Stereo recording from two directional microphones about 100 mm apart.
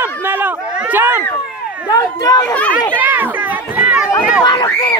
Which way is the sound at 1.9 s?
35° left (ahead or behind).